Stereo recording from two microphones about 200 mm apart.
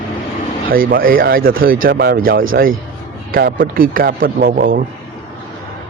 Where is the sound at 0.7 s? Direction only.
45° right (ahead or behind).